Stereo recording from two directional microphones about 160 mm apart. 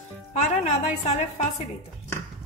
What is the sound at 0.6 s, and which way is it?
Speech, 45° left (ahead or behind).